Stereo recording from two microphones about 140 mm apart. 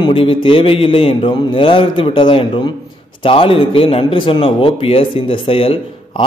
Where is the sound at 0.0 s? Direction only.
40° left (ahead or behind).